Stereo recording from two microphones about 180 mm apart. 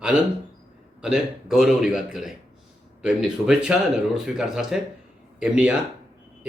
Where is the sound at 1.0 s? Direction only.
5° right (ahead or behind).